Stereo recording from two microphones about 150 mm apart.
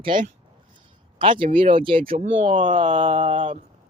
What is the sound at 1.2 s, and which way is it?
Speech, 35° right (ahead or behind).